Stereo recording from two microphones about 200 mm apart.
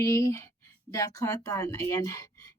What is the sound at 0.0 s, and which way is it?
A woman's voice, 15° left (ahead or behind).